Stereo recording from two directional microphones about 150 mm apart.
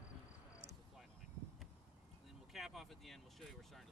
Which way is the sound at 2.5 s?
Centre (ahead or behind).